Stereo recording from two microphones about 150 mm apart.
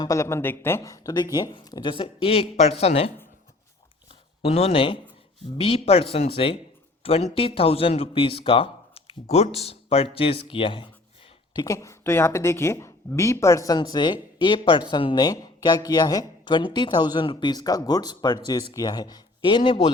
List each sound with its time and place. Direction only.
0.0 s speech: 20° left (ahead or behind); by 3.1 s 45° left (ahead or behind)
4.1 s a sound: 40° left (ahead or behind)
5.5 s speech: 40° left (ahead or behind)
11.5 s speech: 20° left (ahead or behind)